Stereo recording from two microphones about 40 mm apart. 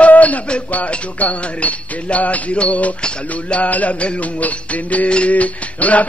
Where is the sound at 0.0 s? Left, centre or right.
Left.